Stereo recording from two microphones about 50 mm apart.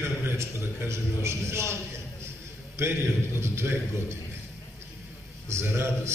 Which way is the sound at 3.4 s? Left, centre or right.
Right.